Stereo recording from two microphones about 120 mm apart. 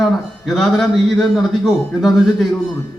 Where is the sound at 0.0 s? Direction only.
Centre (ahead or behind).